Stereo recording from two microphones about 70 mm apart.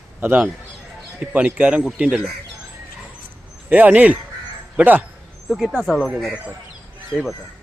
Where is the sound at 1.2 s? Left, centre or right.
Centre.